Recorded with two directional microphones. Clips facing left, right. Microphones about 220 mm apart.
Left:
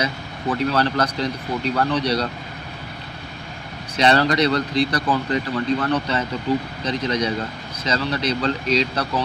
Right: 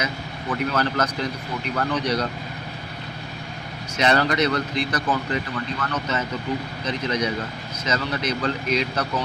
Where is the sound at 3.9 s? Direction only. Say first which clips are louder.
Left 3 dB; 35° left (ahead or behind).